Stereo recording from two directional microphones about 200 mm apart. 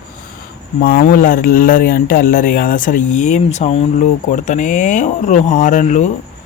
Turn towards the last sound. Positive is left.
turn(degrees=40)  # may be behind; listen again after turning